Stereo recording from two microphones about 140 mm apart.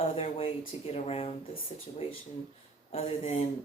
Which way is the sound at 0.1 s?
40° left (ahead or behind).